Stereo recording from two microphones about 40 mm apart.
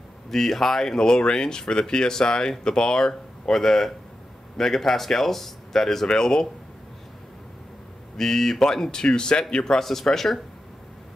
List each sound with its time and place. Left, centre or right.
0.3 s speech: centre
8.2 s speech: centre
9.8 s speech: centre